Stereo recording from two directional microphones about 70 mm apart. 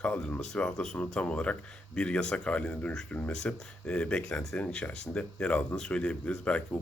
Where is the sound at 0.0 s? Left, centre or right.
Centre.